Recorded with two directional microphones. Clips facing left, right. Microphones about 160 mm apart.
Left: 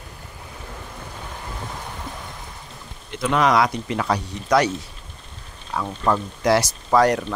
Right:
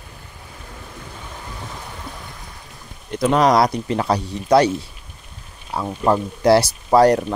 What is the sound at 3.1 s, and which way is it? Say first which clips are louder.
Speech: right 3 dB; 35° right (ahead or behind).